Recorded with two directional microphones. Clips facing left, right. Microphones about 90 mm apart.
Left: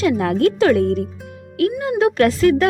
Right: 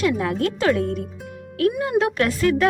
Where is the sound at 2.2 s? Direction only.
45° left (ahead or behind).